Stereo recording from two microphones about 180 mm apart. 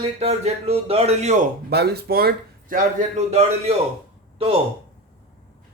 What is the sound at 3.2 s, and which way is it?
Speech, 40° right (ahead or behind).